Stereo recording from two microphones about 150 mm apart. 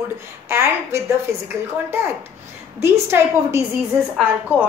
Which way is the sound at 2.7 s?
15° right (ahead or behind).